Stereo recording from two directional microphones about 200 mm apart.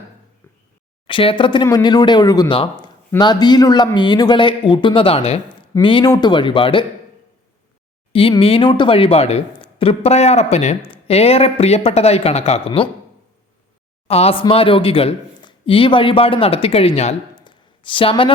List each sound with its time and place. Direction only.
1.0 s speech: 25° left (ahead or behind)
8.1 s speech: 25° left (ahead or behind)
14.1 s speech: 30° left (ahead or behind)